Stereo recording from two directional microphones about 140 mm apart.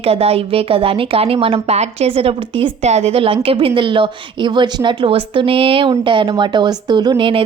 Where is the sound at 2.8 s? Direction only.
50° right (ahead or behind).